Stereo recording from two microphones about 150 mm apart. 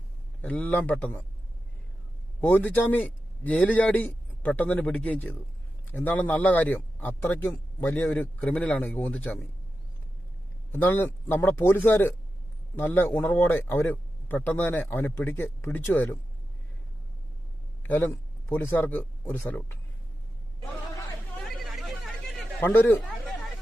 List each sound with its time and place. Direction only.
0.4 s a man's voice: 10° left (ahead or behind)
2.4 s a man's voice: 10° left (ahead or behind)
10.7 s a man's voice: 10° left (ahead or behind)
17.8 s speech: 10° left (ahead or behind)
21.4 s chatter: centre (ahead or behind)
22.6 s speech: 15° left (ahead or behind)